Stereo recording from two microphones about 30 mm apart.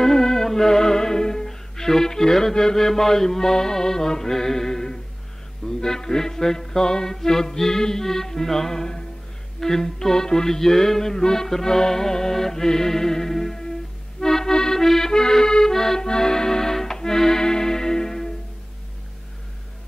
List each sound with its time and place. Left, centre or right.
0.0 s music: centre
14.2 s accordion: centre